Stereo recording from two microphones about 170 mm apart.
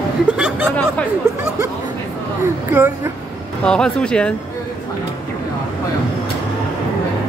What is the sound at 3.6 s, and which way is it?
Speech, 5° left (ahead or behind).